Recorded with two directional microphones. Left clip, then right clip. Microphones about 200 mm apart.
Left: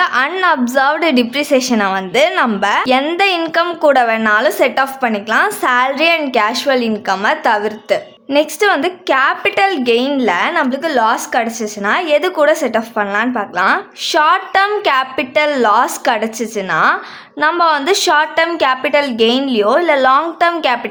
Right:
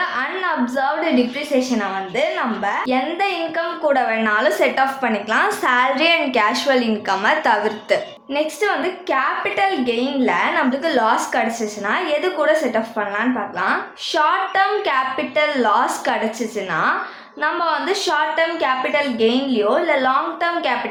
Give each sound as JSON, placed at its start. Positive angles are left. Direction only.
{"t": 0.0, "sound": "a woman's voice", "side_deg": 45}